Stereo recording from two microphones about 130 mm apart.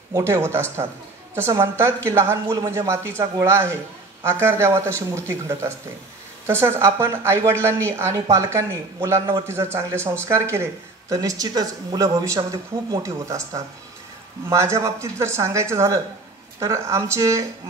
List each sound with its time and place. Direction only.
0.1 s a woman's voice: 20° right (ahead or behind)